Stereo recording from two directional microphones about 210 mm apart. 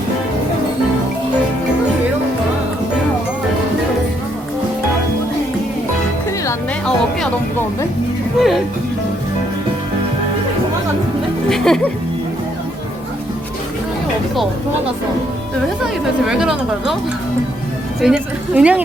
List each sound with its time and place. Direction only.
8.4 s speech: centre (ahead or behind)
11.4 s speech: centre (ahead or behind)
16.2 s speech: 5° right (ahead or behind)
18.0 s speech: 5° right (ahead or behind)